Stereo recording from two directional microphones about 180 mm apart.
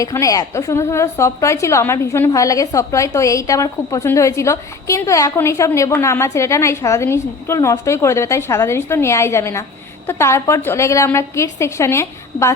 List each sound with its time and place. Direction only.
0.0 s a woman's voice: 20° left (ahead or behind)